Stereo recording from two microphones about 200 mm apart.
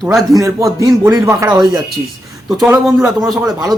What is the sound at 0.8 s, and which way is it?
Speech, 15° right (ahead or behind).